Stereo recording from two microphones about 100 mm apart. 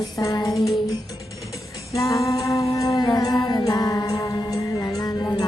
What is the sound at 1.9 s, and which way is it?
Humming, 30° left (ahead or behind).